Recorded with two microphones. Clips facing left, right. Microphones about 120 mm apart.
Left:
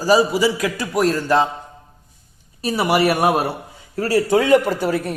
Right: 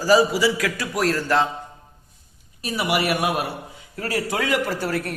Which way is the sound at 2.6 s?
35° left (ahead or behind).